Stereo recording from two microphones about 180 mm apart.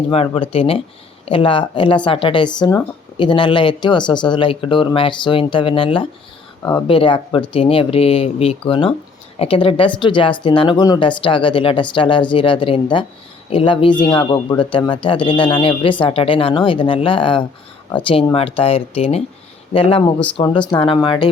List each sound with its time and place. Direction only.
0.1 s speech: 30° left (ahead or behind)